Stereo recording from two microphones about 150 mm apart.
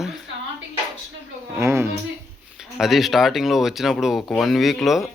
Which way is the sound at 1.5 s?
15° right (ahead or behind).